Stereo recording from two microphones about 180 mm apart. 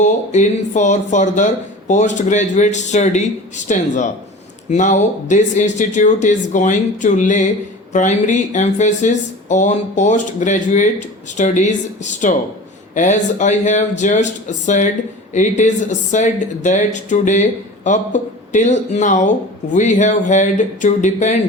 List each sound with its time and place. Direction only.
0.0 s speech: 45° left (ahead or behind)